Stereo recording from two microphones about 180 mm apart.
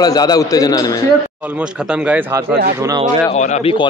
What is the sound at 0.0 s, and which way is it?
Speech, 20° left (ahead or behind).